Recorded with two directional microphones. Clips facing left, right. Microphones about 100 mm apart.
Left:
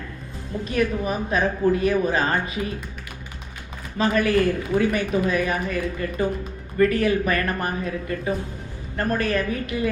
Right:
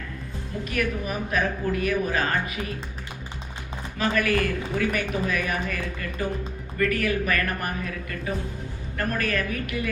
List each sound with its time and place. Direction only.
0.6 s speech: 25° left (ahead or behind)
3.9 s speech: 30° left (ahead or behind)